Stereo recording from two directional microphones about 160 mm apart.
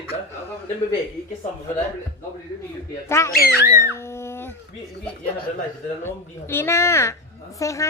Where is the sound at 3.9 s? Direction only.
15° left (ahead or behind).